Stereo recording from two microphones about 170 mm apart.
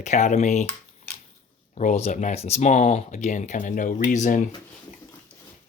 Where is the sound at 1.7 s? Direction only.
40° left (ahead or behind).